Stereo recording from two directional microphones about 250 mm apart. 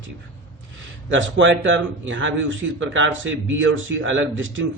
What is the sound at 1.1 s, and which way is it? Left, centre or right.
Speech, right.